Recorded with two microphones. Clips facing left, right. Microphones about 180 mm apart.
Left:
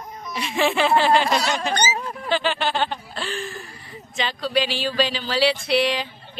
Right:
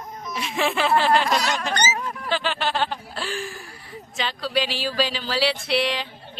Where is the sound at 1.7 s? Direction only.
15° left (ahead or behind).